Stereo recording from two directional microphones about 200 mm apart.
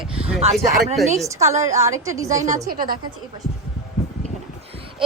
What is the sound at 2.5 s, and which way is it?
Speech, 45° right (ahead or behind).